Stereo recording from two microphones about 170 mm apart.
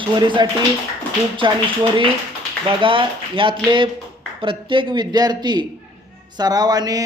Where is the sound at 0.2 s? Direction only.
25° right (ahead or behind).